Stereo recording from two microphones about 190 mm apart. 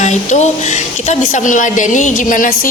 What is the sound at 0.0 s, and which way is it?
A woman's voice, 40° left (ahead or behind).